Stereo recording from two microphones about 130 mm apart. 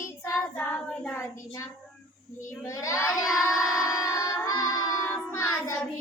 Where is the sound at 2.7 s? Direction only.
25° left (ahead or behind).